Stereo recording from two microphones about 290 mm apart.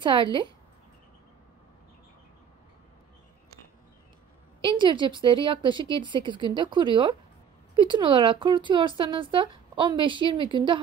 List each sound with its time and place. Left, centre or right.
0.0 s speech: centre
4.6 s speech: centre